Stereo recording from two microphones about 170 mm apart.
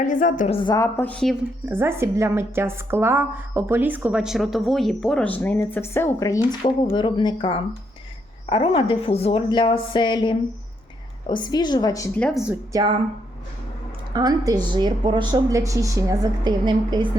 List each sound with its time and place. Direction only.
0.0 s a woman's voice: 50° left (ahead or behind)
0.5 s a woman's voice: 30° left (ahead or behind)
0.8 s a woman's voice: 10° left (ahead or behind)
1.7 s a woman's voice: 15° right (ahead or behind); by 12.2 s 20° left (ahead or behind)
12.2 s speech: centre (ahead or behind)
14.1 s speech: 20° right (ahead or behind)